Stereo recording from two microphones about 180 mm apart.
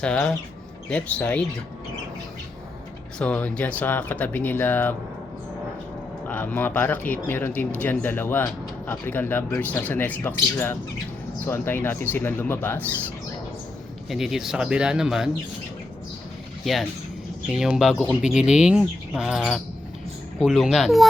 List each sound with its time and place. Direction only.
0.0 s speech: 5° left (ahead or behind)
3.2 s speech: 5° left (ahead or behind)
6.2 s speech: 10° left (ahead or behind)
14.1 s speech: centre (ahead or behind)
17.5 s speech: centre (ahead or behind)